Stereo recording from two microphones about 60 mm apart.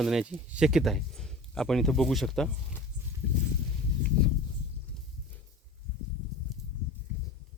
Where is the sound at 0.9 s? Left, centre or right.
Centre.